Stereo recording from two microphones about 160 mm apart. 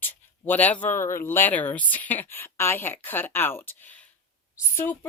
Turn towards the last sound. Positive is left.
turn(degrees=10)  # may be behind; listen again after turning